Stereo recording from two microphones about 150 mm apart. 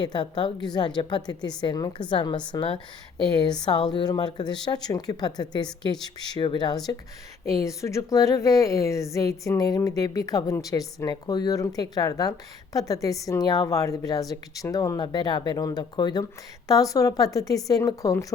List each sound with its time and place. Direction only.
0.0 s a woman's voice: 30° left (ahead or behind)
3.9 s a woman's voice: 30° left (ahead or behind)